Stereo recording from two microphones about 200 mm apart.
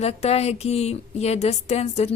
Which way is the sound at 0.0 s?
30° left (ahead or behind).